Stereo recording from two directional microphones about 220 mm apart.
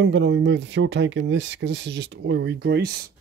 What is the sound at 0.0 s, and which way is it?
Speech, 55° right (ahead or behind).